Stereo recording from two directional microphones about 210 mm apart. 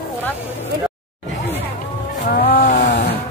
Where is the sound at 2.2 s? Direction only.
45° left (ahead or behind).